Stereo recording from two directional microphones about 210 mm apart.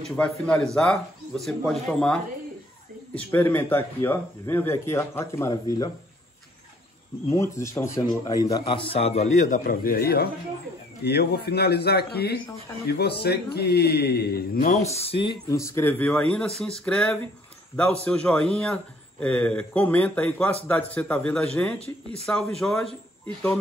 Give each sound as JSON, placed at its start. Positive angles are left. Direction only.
{"t": 0.1, "sound": "speech", "side_deg": 5}
{"t": 7.2, "sound": "a man's voice", "side_deg": 15}
{"t": 22.2, "sound": "speech", "side_deg": 0}